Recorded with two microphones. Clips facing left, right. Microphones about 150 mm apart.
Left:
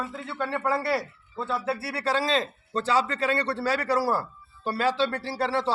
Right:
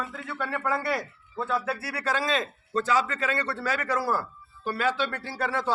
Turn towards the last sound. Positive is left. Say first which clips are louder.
# left 3 dB
turn(degrees=30)  # may be behind; listen again after turning